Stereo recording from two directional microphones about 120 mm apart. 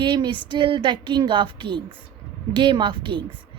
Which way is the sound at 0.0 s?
40° right (ahead or behind).